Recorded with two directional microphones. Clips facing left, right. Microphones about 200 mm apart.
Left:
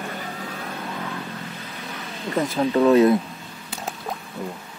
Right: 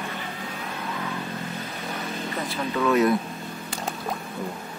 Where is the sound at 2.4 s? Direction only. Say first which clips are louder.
Left 9 dB; 40° left (ahead or behind).